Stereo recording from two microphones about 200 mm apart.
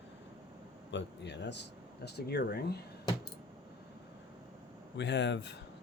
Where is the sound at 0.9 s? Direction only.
60° left (ahead or behind).